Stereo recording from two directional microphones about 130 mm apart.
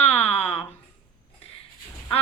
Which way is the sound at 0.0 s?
50° left (ahead or behind).